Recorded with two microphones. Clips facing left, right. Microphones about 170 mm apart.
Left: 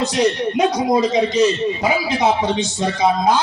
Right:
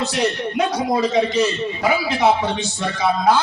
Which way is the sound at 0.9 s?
20° left (ahead or behind).